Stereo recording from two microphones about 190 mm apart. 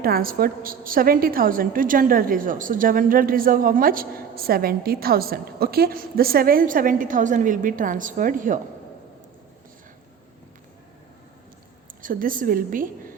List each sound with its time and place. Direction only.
0.0 s a woman's voice: 50° right (ahead or behind)
11.9 s a woman's voice: 45° right (ahead or behind)